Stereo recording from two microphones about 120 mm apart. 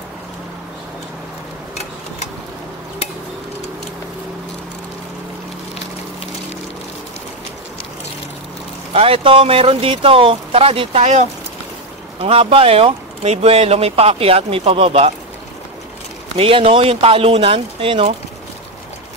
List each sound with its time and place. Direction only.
8.9 s speech: 50° right (ahead or behind)
12.2 s speech: 50° right (ahead or behind)
16.3 s speech: 50° right (ahead or behind)